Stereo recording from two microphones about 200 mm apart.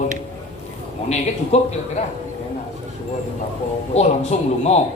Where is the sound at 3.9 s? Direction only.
35° left (ahead or behind).